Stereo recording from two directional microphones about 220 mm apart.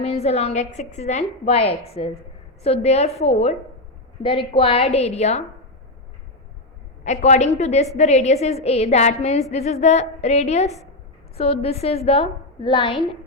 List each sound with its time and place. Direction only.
0.0 s a woman's voice: 30° left (ahead or behind)
7.0 s a woman's voice: 30° left (ahead or behind)